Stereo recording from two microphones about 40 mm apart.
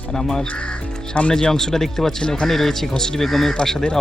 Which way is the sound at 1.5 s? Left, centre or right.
Centre.